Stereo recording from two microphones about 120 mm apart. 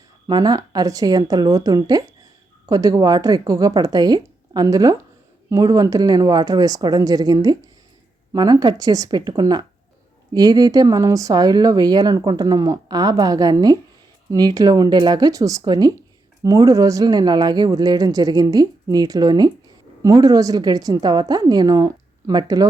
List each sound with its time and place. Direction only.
0.3 s speech: 35° right (ahead or behind)